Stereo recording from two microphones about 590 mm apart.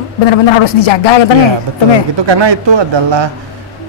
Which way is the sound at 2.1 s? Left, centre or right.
Right.